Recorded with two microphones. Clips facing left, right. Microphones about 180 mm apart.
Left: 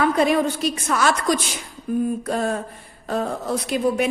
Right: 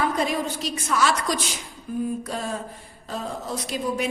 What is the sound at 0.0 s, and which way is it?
A woman's voice, 65° left (ahead or behind).